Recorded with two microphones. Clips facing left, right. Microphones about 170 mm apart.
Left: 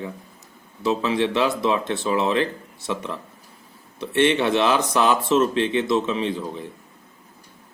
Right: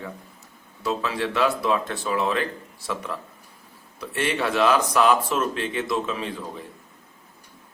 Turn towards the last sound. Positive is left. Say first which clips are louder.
# left 6 dB
turn(degrees=25)  # may be behind; listen again after turning